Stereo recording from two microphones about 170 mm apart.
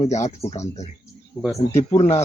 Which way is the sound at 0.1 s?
40° left (ahead or behind).